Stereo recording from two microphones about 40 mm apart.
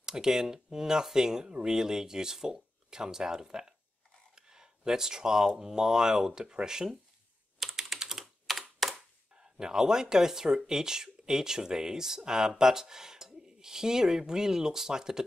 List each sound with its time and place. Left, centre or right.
0.0 s speech: centre
4.4 s a sound: centre
5.6 s speech: centre
7.5 s computer keyboard: centre
9.4 s speech: centre